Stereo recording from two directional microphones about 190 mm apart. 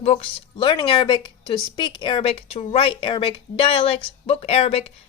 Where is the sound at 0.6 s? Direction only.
25° left (ahead or behind).